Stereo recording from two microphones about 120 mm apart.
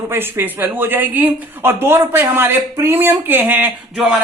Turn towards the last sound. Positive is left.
turn(degrees=-15)  # may be behind; listen again after turning